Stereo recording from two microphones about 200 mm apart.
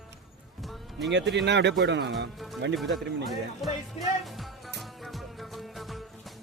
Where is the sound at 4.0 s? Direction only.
30° left (ahead or behind).